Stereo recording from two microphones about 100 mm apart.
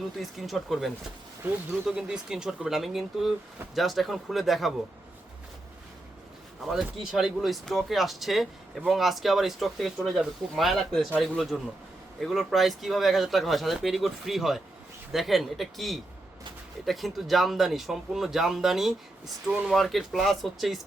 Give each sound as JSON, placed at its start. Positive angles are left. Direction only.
{"t": 0.2, "sound": "speech", "side_deg": 0}
{"t": 6.6, "sound": "speech", "side_deg": -5}